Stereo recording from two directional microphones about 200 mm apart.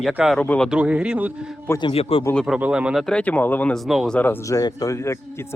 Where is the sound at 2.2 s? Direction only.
Centre (ahead or behind).